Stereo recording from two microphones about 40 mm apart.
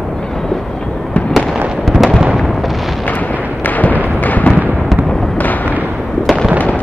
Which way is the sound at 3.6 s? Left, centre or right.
Left.